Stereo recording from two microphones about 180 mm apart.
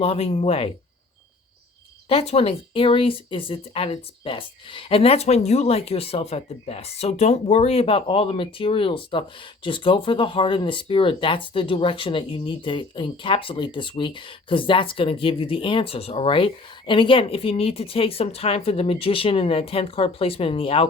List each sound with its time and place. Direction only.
0.0 s speech: 35° left (ahead or behind)
2.0 s speech: 35° left (ahead or behind)